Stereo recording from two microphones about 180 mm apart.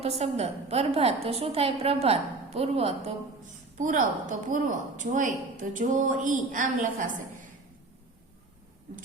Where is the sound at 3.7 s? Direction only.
45° right (ahead or behind).